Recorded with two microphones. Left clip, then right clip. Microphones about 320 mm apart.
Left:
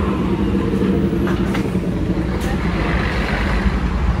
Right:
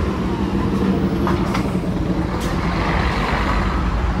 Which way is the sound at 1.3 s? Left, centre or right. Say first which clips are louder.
Even; right.